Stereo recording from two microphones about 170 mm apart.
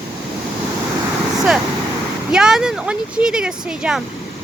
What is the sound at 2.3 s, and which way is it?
Speech, 5° right (ahead or behind).